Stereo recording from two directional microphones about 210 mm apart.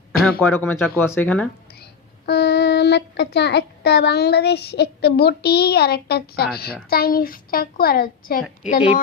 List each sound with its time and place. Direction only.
0.2 s speech: 5° left (ahead or behind)
1.8 s a woman's voice: 50° left (ahead or behind)